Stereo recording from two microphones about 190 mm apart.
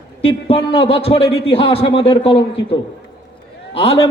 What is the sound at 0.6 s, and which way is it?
A man's voice, 30° left (ahead or behind).